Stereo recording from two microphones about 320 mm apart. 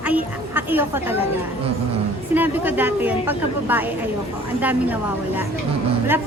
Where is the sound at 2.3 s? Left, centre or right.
Centre.